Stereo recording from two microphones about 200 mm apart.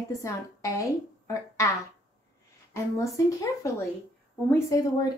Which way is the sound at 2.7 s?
15° left (ahead or behind).